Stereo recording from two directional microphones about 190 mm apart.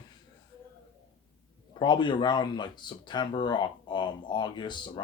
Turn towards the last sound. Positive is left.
turn(degrees=25)  # may be behind; listen again after turning